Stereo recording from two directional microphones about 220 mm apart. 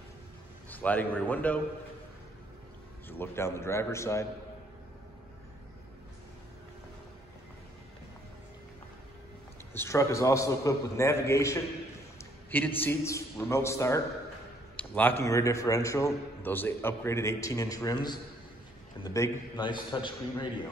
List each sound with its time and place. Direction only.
0.7 s a man's voice: 5° left (ahead or behind)
3.1 s a man's voice: 10° left (ahead or behind)
9.8 s a man's voice: 15° left (ahead or behind)